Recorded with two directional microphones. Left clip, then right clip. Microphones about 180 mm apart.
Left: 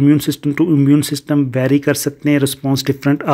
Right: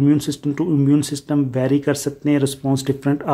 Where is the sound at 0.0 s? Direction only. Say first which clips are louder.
Left 4 dB; 20° left (ahead or behind).